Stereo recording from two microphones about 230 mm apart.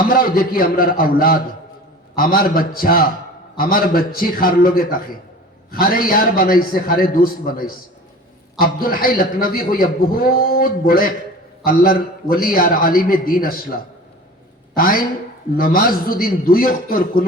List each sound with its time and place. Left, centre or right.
0.0 s a man's voice: left
14.8 s a man's voice: left